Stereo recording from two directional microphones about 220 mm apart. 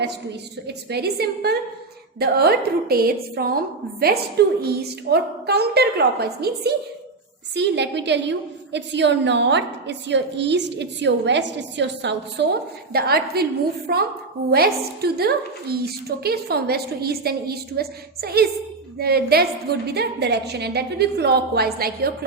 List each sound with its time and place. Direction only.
0.9 s a woman's voice: 45° right (ahead or behind)